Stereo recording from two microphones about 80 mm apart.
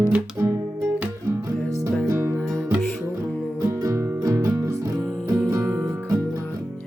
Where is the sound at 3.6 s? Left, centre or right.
Right.